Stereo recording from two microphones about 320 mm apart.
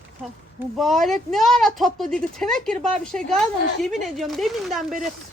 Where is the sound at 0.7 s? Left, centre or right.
Centre.